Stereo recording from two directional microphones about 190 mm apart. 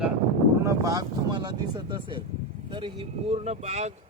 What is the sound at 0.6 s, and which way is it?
Vehicle, 20° right (ahead or behind).